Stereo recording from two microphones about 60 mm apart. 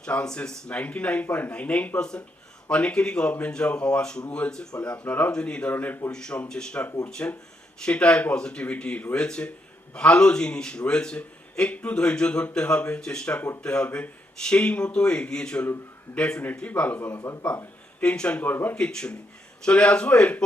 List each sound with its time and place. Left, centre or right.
0.0 s a man's voice: centre
5.7 s speech: left
6.1 s a man's voice: centre
18.0 s a man's voice: centre
18.4 s speech: left
18.8 s a man's voice: centre